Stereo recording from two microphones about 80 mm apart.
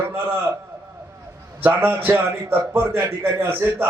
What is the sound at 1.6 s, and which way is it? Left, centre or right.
A man's voice, right.